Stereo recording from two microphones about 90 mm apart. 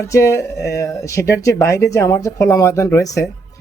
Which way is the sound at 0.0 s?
35° left (ahead or behind).